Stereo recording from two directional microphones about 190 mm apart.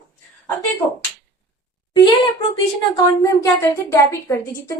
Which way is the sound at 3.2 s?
15° left (ahead or behind).